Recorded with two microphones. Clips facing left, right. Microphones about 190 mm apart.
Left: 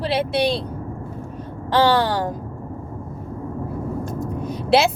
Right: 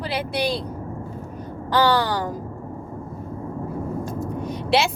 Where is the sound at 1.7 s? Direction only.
25° left (ahead or behind).